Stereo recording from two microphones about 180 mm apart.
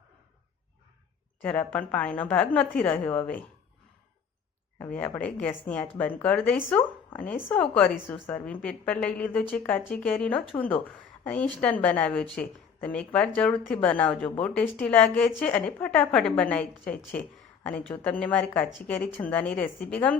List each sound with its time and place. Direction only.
1.5 s a woman's voice: 10° left (ahead or behind)
4.8 s a woman's voice: 10° left (ahead or behind)